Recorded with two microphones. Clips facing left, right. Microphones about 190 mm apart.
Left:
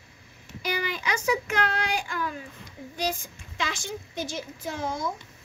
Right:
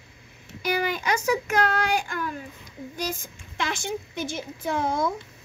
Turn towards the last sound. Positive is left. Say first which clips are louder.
# right 5 dB
turn(degrees=-60)  # may be behind; listen again after turning